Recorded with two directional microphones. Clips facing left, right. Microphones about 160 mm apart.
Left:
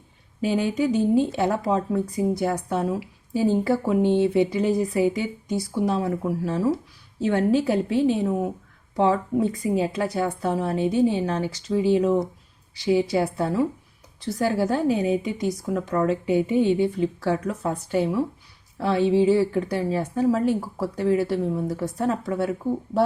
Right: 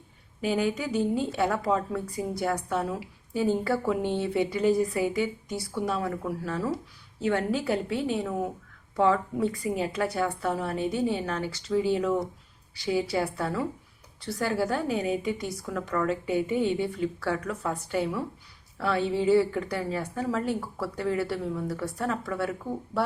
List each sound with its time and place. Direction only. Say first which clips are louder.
0.4 s a woman's voice: left 5 dB; 25° left (ahead or behind)